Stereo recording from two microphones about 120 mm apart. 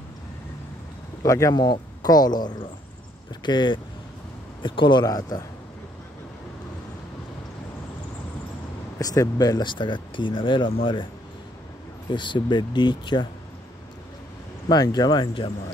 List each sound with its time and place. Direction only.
1.2 s speech: 25° left (ahead or behind)
8.9 s speech: 25° left (ahead or behind); by 11.1 s 45° left (ahead or behind)
12.1 s speech: 40° left (ahead or behind)
14.7 s speech: 35° left (ahead or behind)